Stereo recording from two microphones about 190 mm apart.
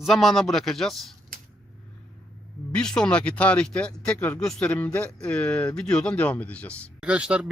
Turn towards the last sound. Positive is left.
turn(degrees=-5)  # may be behind; listen again after turning